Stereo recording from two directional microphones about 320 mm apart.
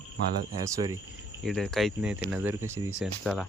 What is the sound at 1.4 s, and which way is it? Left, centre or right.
Speech, centre.